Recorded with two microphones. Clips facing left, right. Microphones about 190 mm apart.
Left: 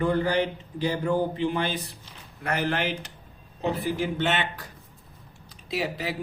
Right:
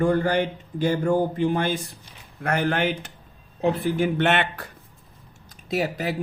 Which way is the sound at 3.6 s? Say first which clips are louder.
Right 5 dB; 60° right (ahead or behind).